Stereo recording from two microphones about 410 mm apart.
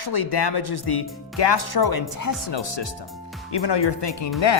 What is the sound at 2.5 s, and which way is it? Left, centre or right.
Speech, left.